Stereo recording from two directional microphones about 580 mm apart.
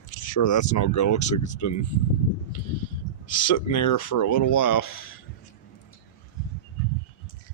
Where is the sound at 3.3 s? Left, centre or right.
Left.